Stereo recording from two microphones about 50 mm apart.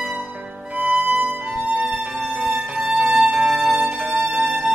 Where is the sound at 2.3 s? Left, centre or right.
Right.